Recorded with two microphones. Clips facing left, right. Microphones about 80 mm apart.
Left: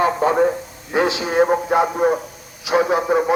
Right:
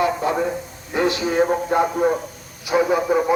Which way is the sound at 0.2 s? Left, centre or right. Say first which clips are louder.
Left 5 dB; left.